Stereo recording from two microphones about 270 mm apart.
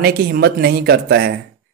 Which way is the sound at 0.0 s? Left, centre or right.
Right.